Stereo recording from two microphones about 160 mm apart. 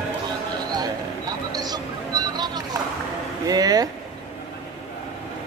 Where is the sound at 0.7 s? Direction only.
25° right (ahead or behind).